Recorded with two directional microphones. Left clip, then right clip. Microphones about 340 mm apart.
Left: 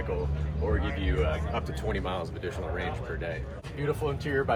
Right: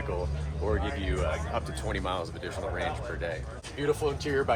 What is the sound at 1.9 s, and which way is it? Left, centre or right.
Speech, centre.